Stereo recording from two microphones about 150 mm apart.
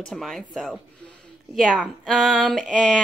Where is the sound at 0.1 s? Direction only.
Centre (ahead or behind).